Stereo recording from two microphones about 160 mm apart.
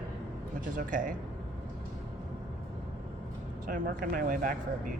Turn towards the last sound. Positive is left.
turn(degrees=-60)  # may be behind; listen again after turning